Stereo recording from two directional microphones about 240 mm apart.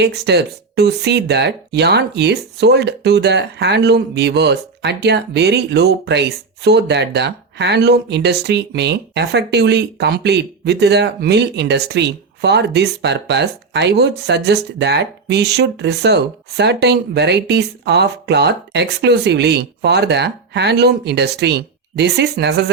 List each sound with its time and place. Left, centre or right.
0.0 s speech: right